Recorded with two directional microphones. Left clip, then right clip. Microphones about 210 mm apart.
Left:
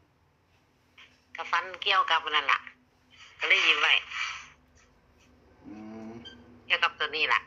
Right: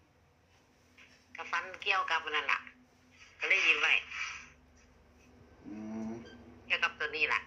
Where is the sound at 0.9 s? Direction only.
20° left (ahead or behind).